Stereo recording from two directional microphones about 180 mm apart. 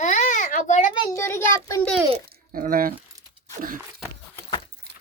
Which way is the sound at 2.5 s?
50° right (ahead or behind).